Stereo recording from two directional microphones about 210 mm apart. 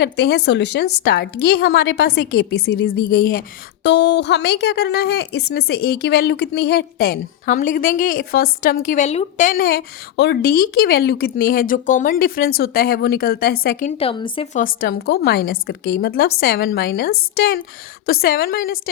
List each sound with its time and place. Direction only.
0.0 s speech: 50° left (ahead or behind)
3.8 s a woman's voice: 55° left (ahead or behind); by 14.4 s 25° left (ahead or behind)
14.8 s speech: 50° left (ahead or behind)